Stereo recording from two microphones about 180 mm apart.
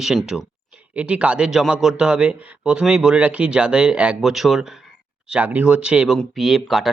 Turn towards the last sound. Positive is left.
turn(degrees=0)  # may be behind; listen again after turning